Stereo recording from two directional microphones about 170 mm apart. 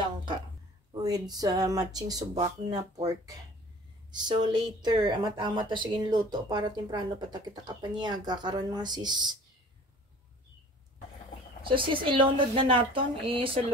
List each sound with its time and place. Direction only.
0.0 s a sound: 25° right (ahead or behind)
0.9 s speech: 25° right (ahead or behind)
11.6 s a woman's voice: 30° right (ahead or behind)